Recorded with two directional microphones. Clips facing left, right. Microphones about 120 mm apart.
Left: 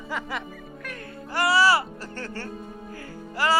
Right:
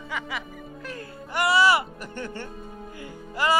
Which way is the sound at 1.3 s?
20° right (ahead or behind).